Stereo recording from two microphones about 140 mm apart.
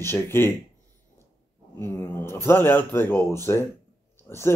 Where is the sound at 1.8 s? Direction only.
15° left (ahead or behind).